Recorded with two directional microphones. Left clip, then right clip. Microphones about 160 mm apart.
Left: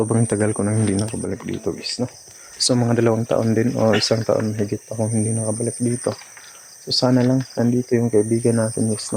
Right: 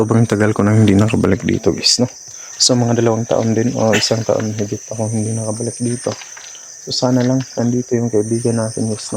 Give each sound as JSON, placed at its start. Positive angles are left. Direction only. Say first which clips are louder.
{"t": 0.0, "sound": "speech", "louder": "right 5 dB", "side_deg": -25}
{"t": 0.6, "sound": "speech", "louder": "right 8 dB", "side_deg": -45}
{"t": 0.9, "sound": "speech", "louder": "right 11 dB", "side_deg": -85}
{"t": 2.6, "sound": "speech", "louder": "right 5 dB", "side_deg": -20}
{"t": 6.8, "sound": "speech", "louder": "right 2 dB", "side_deg": 0}